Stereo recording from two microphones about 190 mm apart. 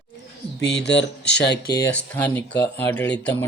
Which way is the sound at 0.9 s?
65° left (ahead or behind).